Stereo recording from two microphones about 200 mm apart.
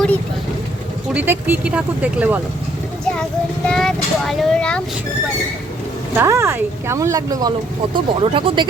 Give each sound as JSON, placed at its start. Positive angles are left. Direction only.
{"t": 1.1, "sound": "speech", "side_deg": -10}
{"t": 3.7, "sound": "speech", "side_deg": 0}
{"t": 6.1, "sound": "speech", "side_deg": -15}